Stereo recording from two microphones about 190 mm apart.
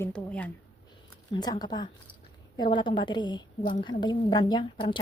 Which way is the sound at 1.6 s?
20° left (ahead or behind).